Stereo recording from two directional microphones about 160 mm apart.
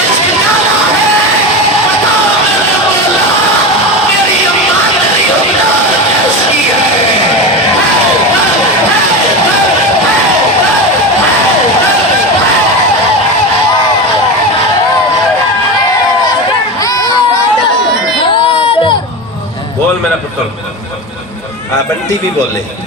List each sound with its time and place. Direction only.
16.8 s crowd: 25° left (ahead or behind)
18.5 s crowd: 30° left (ahead or behind)